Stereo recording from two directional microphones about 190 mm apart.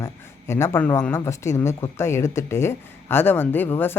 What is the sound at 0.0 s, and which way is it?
Speech, 15° left (ahead or behind).